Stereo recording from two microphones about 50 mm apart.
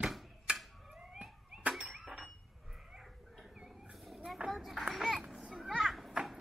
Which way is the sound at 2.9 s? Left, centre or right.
Centre.